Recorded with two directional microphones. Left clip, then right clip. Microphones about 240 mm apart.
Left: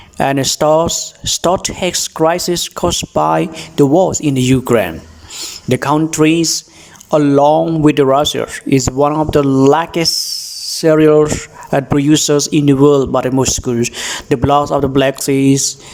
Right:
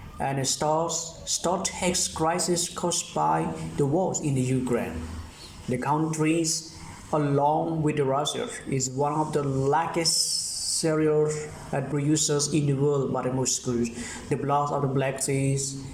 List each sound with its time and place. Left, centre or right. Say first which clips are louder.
0.2 s speech: left 14 dB; left